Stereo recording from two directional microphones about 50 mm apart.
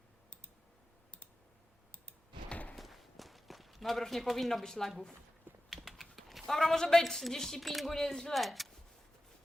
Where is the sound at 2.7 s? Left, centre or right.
Centre.